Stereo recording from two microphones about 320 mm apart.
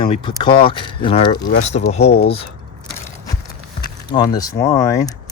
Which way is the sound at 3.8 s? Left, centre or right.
Centre.